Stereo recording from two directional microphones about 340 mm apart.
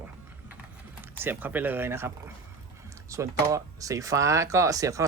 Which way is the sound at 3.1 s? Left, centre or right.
Centre.